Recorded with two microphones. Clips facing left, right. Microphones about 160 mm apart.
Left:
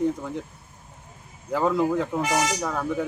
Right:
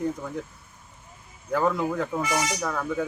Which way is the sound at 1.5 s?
5° left (ahead or behind).